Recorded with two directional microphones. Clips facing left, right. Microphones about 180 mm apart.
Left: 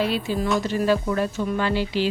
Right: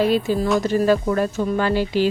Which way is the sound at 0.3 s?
45° right (ahead or behind).